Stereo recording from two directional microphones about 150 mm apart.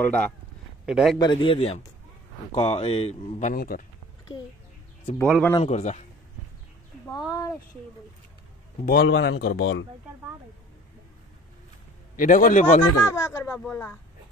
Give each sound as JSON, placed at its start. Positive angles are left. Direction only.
{"t": 0.0, "sound": "speech", "side_deg": 10}
{"t": 0.8, "sound": "a man's voice", "side_deg": -5}
{"t": 1.1, "sound": "speech", "side_deg": 30}
{"t": 3.5, "sound": "speech", "side_deg": 75}
{"t": 5.6, "sound": "a man's voice", "side_deg": 45}
{"t": 7.2, "sound": "speech", "side_deg": 25}
{"t": 8.8, "sound": "speech", "side_deg": 90}
{"t": 12.2, "sound": "a man's voice", "side_deg": 60}
{"t": 13.0, "sound": "speech", "side_deg": 20}